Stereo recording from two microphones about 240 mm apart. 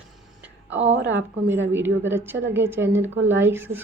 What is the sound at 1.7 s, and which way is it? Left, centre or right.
A woman's voice, centre.